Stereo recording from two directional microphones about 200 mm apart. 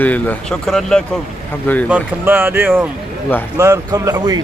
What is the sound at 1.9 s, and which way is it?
Speech, 10° right (ahead or behind).